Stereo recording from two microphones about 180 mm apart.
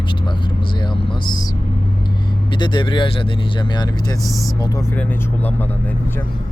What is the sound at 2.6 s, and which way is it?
Speech, 25° left (ahead or behind).